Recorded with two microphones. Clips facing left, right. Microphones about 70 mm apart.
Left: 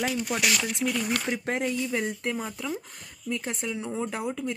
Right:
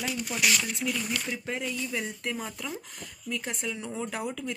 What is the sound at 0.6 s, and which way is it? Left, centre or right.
Speech, left.